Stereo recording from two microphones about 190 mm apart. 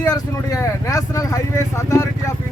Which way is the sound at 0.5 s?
15° left (ahead or behind).